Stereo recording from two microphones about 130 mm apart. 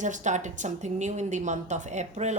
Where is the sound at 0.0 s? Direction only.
70° right (ahead or behind).